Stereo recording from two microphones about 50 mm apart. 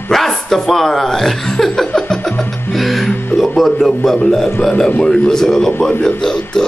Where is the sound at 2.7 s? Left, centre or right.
Centre.